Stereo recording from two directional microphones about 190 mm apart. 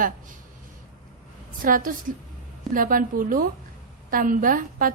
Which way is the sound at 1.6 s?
45° right (ahead or behind).